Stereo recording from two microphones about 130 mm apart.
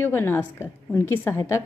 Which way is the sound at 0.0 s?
20° left (ahead or behind).